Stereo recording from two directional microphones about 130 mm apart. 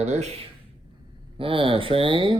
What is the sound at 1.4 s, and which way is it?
Speech, 45° right (ahead or behind).